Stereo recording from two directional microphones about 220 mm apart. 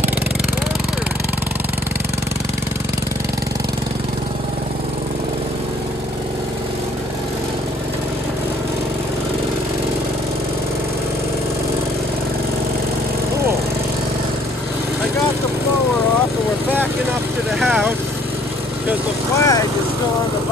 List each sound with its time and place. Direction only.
17.6 s vehicle: centre (ahead or behind)
19.3 s vehicle: 15° left (ahead or behind)